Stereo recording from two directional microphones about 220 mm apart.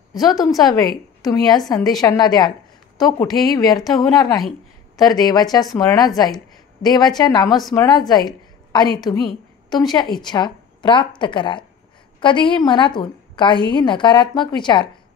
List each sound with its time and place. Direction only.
0.2 s a woman's voice: 15° left (ahead or behind)
7.4 s a woman's voice: centre (ahead or behind)
7.7 s a woman's voice: 15° left (ahead or behind)
8.1 s a sound: 20° left (ahead or behind)
9.7 s a woman's voice: 20° left (ahead or behind)